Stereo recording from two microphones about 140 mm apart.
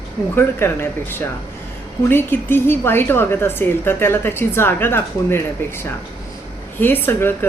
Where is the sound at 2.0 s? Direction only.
15° left (ahead or behind).